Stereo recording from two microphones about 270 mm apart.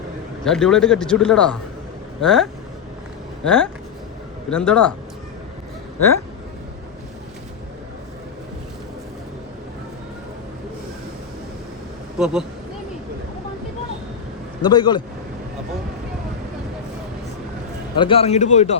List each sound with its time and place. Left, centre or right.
0.4 s speech: centre
12.2 s speech: centre
14.6 s a man's voice: centre
17.9 s speech: centre